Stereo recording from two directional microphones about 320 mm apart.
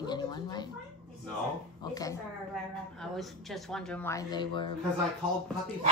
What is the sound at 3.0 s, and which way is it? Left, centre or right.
Speech, centre.